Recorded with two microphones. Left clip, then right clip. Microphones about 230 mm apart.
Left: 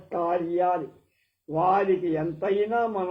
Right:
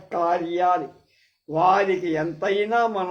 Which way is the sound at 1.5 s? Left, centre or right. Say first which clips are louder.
Right 3 dB; right.